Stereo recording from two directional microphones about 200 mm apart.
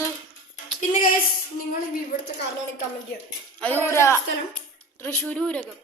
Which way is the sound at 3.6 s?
10° left (ahead or behind).